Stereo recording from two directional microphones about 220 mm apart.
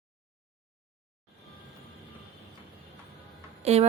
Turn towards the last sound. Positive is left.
turn(degrees=-30)  # may be behind; listen again after turning